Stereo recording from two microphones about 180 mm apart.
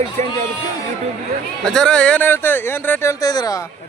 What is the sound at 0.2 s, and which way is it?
Speech, 40° right (ahead or behind).